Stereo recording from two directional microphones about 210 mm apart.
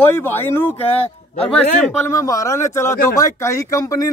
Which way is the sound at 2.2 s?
15° left (ahead or behind).